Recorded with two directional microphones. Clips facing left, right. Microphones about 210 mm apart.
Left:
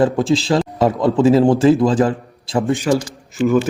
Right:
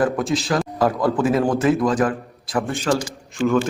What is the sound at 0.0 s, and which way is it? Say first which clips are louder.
A man's voice: left 5 dB; 30° left (ahead or behind).